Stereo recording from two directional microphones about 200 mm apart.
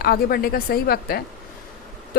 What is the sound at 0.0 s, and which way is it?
A woman's voice, 50° left (ahead or behind).